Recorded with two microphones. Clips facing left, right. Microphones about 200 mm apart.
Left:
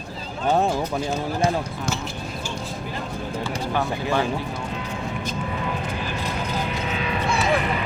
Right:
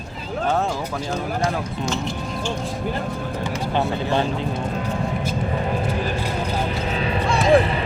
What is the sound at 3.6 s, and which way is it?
Speech, 20° right (ahead or behind).